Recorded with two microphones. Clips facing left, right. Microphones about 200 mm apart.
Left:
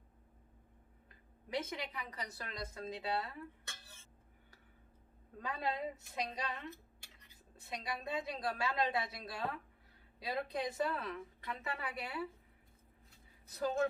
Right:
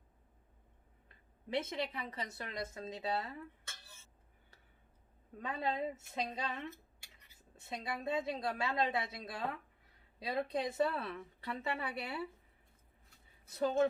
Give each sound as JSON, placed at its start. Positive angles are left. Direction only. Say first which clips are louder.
{"t": 1.5, "sound": "speech", "louder": "right 3 dB", "side_deg": -30}
{"t": 5.4, "sound": "speech", "louder": "right 2 dB", "side_deg": -25}
{"t": 7.5, "sound": "speech", "louder": "right 1 dB", "side_deg": -25}
{"t": 13.6, "sound": "speech", "louder": "right 3 dB", "side_deg": -25}